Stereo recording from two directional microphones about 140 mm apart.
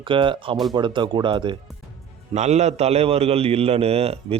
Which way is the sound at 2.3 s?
55° right (ahead or behind).